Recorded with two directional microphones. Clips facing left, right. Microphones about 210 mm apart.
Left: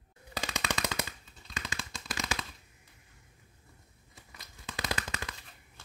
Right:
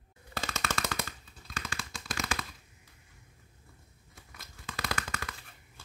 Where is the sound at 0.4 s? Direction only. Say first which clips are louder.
Even; 15° left (ahead or behind).